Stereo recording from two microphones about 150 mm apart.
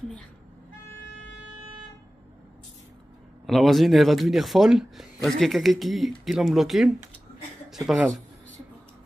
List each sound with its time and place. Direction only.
3.4 s speech: centre (ahead or behind)